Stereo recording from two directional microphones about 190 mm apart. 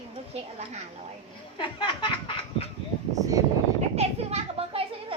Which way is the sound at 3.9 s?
30° right (ahead or behind).